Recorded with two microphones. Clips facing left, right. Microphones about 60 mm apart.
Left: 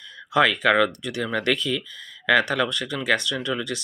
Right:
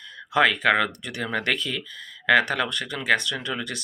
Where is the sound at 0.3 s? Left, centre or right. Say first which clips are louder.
Left 1 dB; right.